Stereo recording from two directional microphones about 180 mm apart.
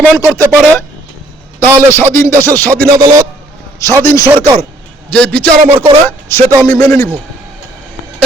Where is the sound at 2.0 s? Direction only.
15° left (ahead or behind).